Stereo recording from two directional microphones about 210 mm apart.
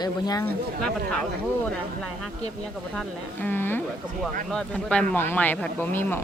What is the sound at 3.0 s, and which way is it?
Speech, 10° left (ahead or behind).